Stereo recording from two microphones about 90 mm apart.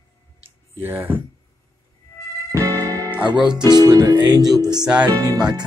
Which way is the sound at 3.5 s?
55° right (ahead or behind).